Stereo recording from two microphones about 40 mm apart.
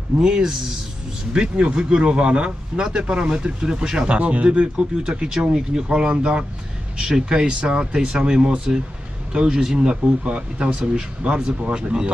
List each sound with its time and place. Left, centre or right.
0.2 s speech: centre
10.2 s speech: right
10.7 s speech: centre